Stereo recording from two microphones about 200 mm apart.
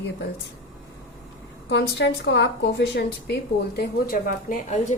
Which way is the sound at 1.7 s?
60° left (ahead or behind).